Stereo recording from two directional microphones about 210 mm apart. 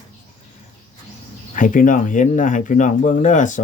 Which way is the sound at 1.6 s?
40° left (ahead or behind).